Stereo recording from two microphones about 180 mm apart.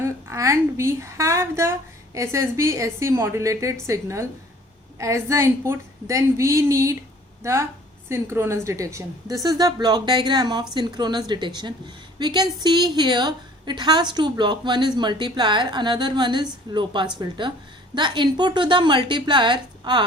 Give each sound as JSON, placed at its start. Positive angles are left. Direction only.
{"t": 0.0, "sound": "a woman's voice", "side_deg": -15}